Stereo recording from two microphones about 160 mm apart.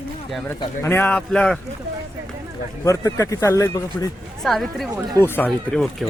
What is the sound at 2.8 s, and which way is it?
A man's voice, 20° left (ahead or behind).